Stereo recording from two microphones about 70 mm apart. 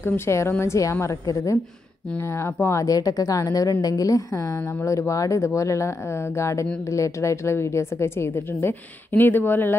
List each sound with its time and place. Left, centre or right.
0.0 s a woman's voice: left
2.1 s a woman's voice: left